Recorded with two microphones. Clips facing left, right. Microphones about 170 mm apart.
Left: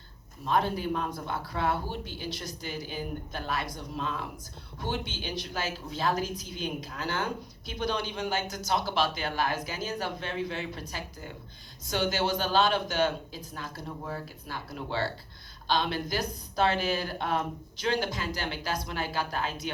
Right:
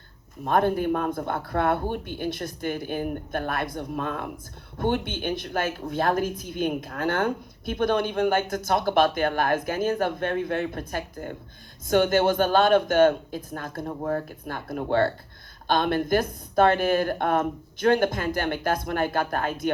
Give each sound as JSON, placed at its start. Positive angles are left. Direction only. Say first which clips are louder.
{"t": 0.4, "sound": "speech", "louder": "right 6 dB", "side_deg": -55}